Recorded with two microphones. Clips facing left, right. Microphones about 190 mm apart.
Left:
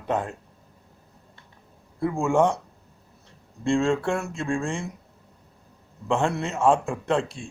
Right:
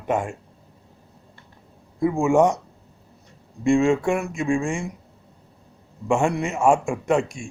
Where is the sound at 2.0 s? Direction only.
15° right (ahead or behind).